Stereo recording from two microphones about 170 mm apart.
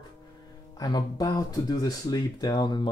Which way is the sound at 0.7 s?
20° left (ahead or behind).